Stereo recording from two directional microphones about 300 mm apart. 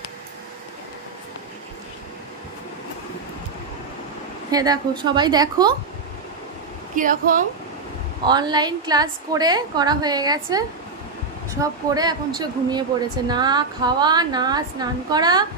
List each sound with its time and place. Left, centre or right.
4.5 s a woman's voice: centre
7.0 s speech: right
8.3 s a woman's voice: centre
11.6 s a woman's voice: centre